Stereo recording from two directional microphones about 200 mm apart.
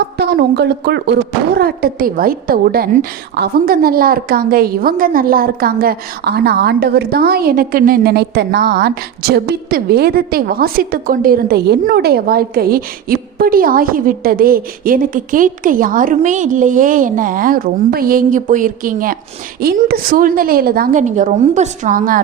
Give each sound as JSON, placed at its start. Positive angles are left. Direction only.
{"t": 0.0, "sound": "a woman's voice", "side_deg": -55}